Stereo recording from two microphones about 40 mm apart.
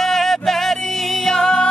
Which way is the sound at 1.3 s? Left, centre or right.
Centre.